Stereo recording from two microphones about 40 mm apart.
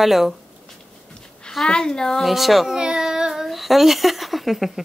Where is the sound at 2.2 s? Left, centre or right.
Centre.